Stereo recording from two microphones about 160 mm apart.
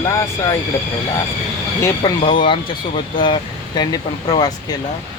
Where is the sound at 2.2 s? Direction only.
45° left (ahead or behind).